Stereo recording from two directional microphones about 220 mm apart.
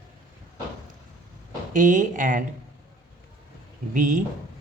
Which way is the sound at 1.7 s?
35° right (ahead or behind).